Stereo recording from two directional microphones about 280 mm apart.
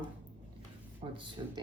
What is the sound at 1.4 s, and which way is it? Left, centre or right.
Speech, centre.